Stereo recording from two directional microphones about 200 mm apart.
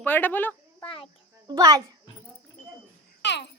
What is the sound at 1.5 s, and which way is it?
Speech, 15° right (ahead or behind).